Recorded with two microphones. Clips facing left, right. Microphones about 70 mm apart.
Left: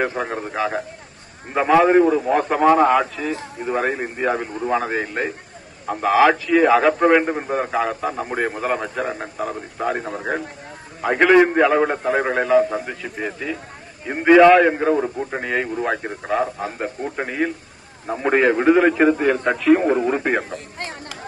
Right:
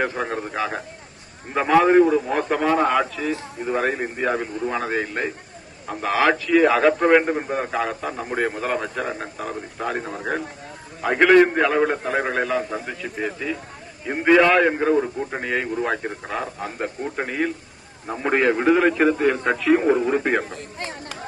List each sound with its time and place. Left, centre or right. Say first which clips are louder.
0.0 s a man's voice: left 1 dB; centre
20.5 s speech: left 1 dB; left